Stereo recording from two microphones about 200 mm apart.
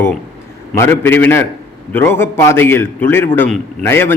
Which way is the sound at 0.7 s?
10° left (ahead or behind).